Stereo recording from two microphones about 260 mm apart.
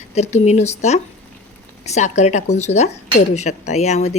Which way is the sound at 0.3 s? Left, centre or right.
Left.